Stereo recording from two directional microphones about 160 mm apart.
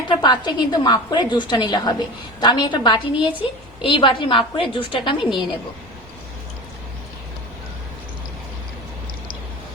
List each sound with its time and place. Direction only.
0.1 s a woman's voice: 25° left (ahead or behind)